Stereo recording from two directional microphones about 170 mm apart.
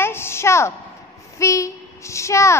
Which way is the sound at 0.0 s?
15° left (ahead or behind).